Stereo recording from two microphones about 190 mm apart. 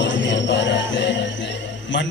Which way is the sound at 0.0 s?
75° left (ahead or behind).